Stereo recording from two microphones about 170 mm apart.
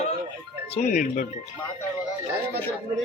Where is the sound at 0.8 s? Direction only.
50° left (ahead or behind).